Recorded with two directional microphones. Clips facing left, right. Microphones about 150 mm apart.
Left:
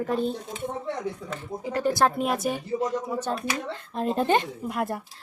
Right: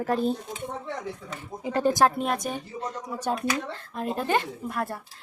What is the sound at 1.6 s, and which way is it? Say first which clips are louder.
Speech: right 2 dB; 25° right (ahead or behind).